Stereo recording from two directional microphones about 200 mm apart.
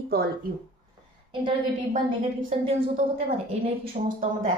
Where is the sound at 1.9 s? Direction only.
40° right (ahead or behind).